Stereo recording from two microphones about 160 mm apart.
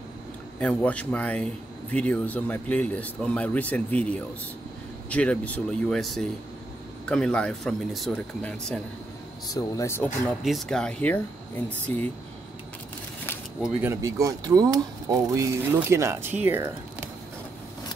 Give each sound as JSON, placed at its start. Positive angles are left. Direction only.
{"t": 0.6, "sound": "speech", "side_deg": 10}
{"t": 9.5, "sound": "speech", "side_deg": 20}
{"t": 10.4, "sound": "speech", "side_deg": 0}
{"t": 14.0, "sound": "speech", "side_deg": -20}